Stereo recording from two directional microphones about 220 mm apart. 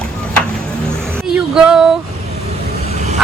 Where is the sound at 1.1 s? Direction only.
5° right (ahead or behind).